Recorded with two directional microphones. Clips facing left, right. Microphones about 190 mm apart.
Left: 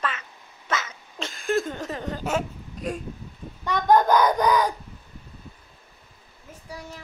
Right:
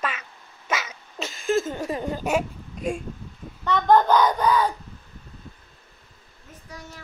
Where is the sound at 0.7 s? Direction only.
10° right (ahead or behind).